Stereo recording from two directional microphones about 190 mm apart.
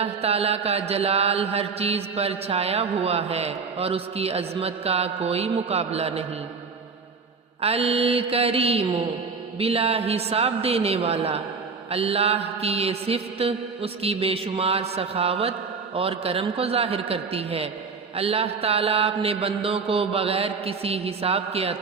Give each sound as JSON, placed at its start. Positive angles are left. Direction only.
{"t": 0.0, "sound": "mantra", "side_deg": -30}
{"t": 7.6, "sound": "mantra", "side_deg": -30}